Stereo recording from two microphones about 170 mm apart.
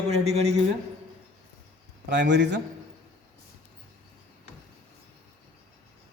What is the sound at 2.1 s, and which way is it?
Speech, 90° right.